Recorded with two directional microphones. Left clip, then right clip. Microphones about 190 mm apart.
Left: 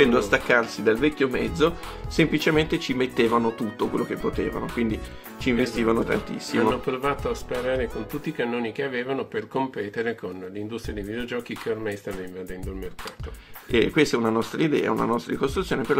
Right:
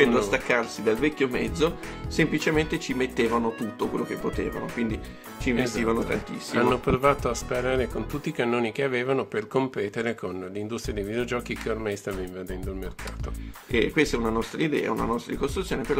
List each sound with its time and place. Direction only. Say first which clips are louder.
0.1 s speech: left 3 dB; 10° left (ahead or behind)
6.7 s speech: right 3 dB; 45° right (ahead or behind)
13.7 s speech: left 3 dB; 15° left (ahead or behind)